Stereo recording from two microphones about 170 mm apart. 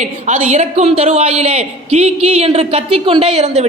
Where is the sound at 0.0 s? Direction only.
40° right (ahead or behind).